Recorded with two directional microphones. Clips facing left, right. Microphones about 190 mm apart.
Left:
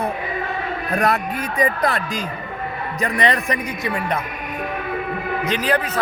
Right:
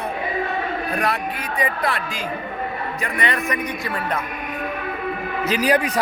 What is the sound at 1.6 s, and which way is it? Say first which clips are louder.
A man's voice: left 4 dB; 40° left (ahead or behind).